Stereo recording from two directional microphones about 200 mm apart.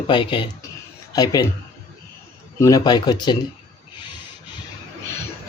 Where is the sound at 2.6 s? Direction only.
15° left (ahead or behind).